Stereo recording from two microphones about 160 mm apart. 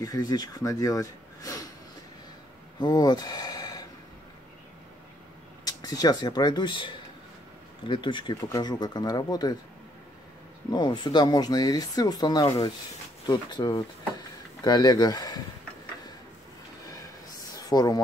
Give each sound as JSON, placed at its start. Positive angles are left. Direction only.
{"t": 0.0, "sound": "speech", "side_deg": 25}
{"t": 2.8, "sound": "speech", "side_deg": 25}
{"t": 5.7, "sound": "speech", "side_deg": 25}
{"t": 10.7, "sound": "speech", "side_deg": 30}
{"t": 17.6, "sound": "speech", "side_deg": 25}